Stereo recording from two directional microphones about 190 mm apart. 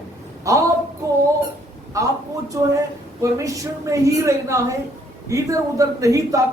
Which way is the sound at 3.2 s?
15° right (ahead or behind).